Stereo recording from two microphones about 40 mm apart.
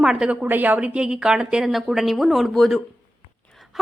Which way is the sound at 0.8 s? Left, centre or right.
Right.